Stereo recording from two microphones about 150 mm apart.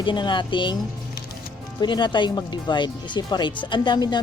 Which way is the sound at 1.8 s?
30° left (ahead or behind).